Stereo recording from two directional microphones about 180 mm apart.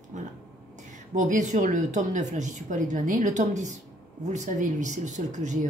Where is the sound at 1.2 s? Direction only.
45° right (ahead or behind).